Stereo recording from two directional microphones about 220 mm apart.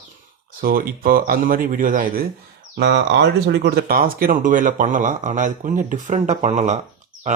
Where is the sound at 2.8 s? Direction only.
50° right (ahead or behind).